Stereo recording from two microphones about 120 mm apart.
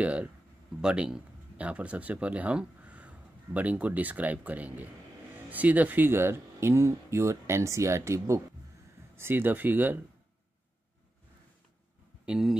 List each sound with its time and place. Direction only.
0.0 s speech: 10° right (ahead or behind)
12.3 s speech: 5° right (ahead or behind)